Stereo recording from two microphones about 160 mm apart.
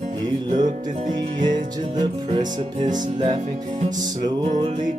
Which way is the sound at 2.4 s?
50° right (ahead or behind).